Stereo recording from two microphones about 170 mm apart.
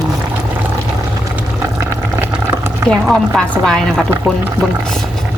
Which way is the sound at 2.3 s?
5° right (ahead or behind).